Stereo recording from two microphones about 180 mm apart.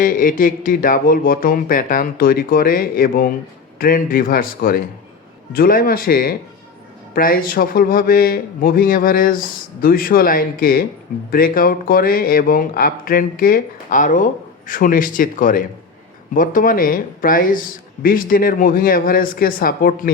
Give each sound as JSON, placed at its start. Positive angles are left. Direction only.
{"t": 0.0, "sound": "speech", "side_deg": 50}